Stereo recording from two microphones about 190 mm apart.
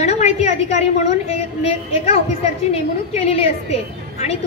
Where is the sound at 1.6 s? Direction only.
30° left (ahead or behind).